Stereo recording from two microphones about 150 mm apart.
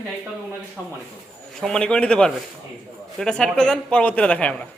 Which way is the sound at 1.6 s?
5° left (ahead or behind).